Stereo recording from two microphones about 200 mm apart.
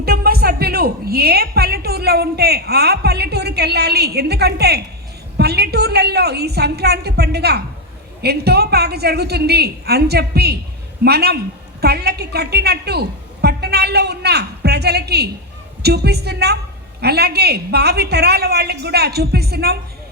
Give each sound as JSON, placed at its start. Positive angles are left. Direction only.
{"t": 0.0, "sound": "a woman's voice", "side_deg": -50}